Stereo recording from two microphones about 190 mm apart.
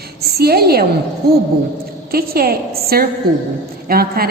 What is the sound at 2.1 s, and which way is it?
A woman's voice, 50° right (ahead or behind).